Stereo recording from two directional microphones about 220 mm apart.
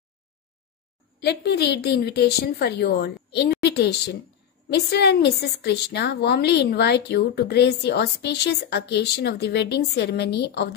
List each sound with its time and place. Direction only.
1.2 s a woman's voice: 50° left (ahead or behind)